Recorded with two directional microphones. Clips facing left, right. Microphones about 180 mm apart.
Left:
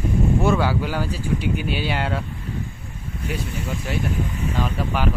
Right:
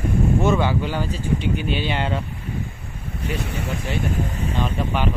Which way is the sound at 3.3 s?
70° right (ahead or behind).